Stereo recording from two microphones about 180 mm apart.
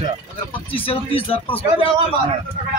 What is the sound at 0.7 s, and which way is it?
Speech, 30° left (ahead or behind).